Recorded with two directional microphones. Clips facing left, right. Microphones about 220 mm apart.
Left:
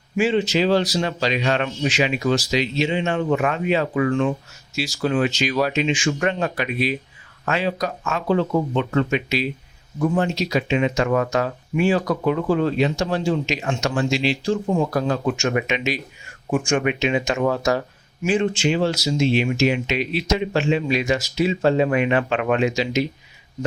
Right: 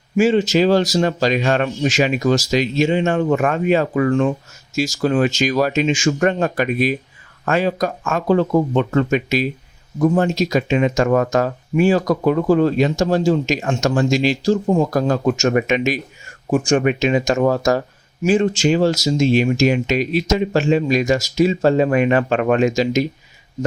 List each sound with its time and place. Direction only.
0.2 s speech: 45° right (ahead or behind)
16.5 s speech: 40° right (ahead or behind)